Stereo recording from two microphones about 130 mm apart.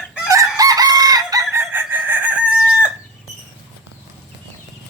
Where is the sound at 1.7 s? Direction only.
15° right (ahead or behind).